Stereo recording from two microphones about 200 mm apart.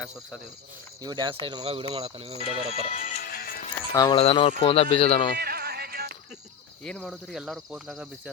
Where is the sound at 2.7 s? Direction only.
30° left (ahead or behind).